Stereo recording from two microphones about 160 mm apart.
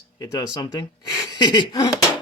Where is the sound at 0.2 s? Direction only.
25° left (ahead or behind).